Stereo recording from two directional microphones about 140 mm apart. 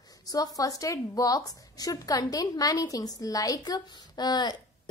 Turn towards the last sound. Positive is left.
turn(degrees=30)  # may be behind; listen again after turning